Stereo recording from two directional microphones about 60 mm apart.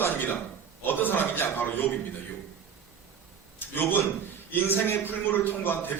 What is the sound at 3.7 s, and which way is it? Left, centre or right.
A man's voice, left.